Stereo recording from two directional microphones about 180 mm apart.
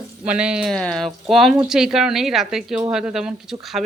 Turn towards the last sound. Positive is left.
turn(degrees=0)  # may be behind; listen again after turning